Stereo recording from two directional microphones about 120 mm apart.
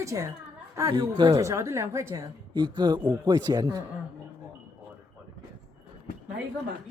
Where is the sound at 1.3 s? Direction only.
25° right (ahead or behind).